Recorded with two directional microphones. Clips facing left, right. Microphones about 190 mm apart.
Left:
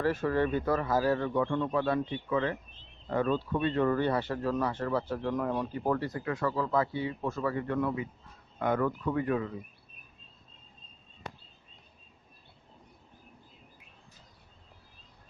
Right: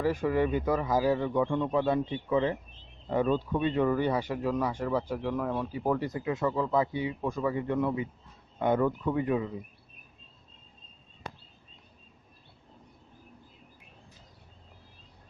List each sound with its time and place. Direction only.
0.0 s speech: 15° right (ahead or behind)
6.1 s speech: 20° right (ahead or behind)